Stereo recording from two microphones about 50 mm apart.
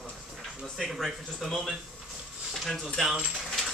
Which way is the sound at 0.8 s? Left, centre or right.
Centre.